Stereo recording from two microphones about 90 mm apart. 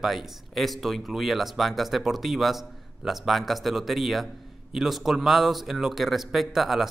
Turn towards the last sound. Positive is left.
turn(degrees=0)  # may be behind; listen again after turning